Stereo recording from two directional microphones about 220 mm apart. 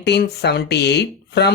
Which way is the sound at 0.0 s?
50° left (ahead or behind).